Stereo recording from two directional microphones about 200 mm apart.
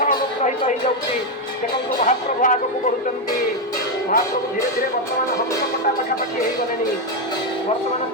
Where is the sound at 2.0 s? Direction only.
40° left (ahead or behind).